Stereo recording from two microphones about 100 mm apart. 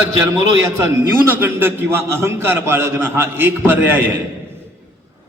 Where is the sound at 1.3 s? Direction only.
20° right (ahead or behind).